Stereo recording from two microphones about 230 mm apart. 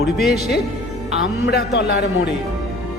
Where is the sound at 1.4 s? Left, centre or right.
Left.